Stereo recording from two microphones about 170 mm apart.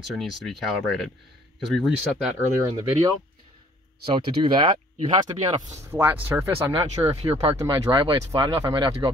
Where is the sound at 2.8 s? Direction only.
20° right (ahead or behind).